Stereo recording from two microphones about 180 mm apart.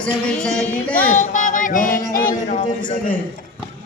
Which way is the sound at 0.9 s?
10° left (ahead or behind).